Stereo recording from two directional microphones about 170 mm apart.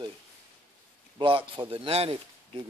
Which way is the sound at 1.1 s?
30° right (ahead or behind).